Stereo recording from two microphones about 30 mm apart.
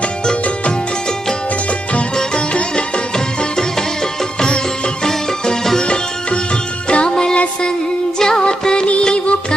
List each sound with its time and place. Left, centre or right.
2.5 s music: left
4.4 s music: left
5.0 s music: centre
6.8 s music: left
8.2 s music: left
9.0 s music: left